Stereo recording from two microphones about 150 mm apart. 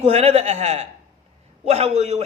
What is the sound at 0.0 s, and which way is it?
A man's voice, 45° right (ahead or behind).